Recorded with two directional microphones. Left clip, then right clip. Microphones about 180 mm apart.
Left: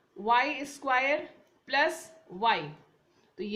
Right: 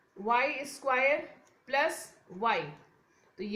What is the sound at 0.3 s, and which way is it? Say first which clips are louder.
Speech: left 2 dB; 55° left (ahead or behind).